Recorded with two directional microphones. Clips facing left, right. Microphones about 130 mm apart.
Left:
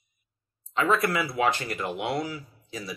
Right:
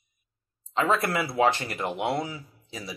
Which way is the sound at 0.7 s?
30° right (ahead or behind).